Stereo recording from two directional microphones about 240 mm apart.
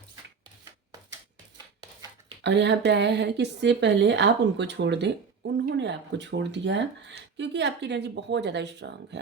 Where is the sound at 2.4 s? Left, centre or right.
Right.